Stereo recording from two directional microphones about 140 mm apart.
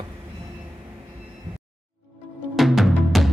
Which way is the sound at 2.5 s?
Centre (ahead or behind).